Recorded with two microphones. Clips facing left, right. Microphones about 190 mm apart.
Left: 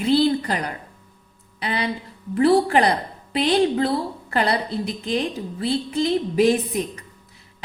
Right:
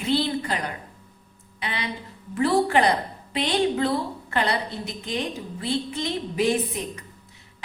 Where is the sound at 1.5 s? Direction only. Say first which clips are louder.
Left 6 dB; 35° left (ahead or behind).